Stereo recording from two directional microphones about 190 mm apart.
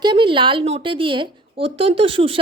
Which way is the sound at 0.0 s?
25° right (ahead or behind).